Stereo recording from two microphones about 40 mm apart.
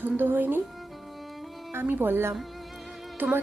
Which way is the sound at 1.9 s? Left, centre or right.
Right.